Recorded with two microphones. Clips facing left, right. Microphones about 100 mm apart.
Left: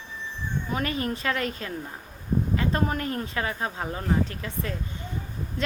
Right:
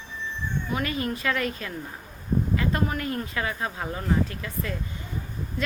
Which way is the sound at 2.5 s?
30° left (ahead or behind).